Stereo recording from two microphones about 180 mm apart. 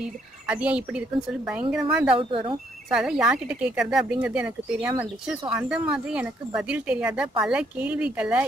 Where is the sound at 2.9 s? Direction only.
5° right (ahead or behind).